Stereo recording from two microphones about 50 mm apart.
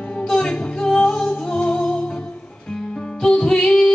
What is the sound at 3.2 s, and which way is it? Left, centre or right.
Music, centre.